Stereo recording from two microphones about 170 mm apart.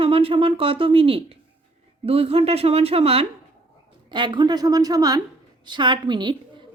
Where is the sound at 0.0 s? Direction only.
35° right (ahead or behind).